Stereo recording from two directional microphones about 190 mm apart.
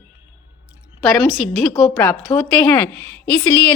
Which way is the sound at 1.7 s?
20° left (ahead or behind).